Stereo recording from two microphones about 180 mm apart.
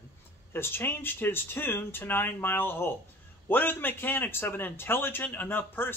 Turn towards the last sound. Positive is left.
turn(degrees=10)  # may be behind; listen again after turning